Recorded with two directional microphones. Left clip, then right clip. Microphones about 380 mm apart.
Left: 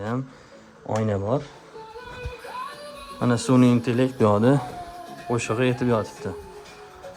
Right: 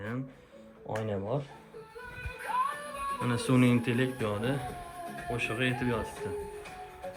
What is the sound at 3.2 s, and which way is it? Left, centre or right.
Speech, centre.